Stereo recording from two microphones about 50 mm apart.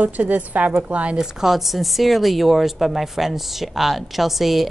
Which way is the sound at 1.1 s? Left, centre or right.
Centre.